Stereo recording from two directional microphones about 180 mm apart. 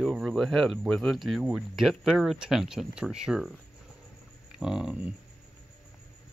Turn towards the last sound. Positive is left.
turn(degrees=-5)  # may be behind; listen again after turning